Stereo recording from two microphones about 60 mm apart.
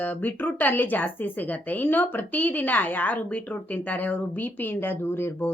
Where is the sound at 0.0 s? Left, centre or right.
Left.